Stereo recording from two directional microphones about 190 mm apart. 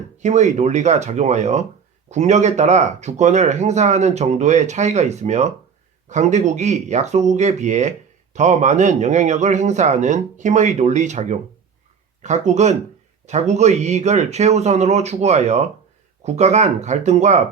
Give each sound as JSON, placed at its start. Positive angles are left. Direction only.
{"t": 0.2, "sound": "speech", "side_deg": -40}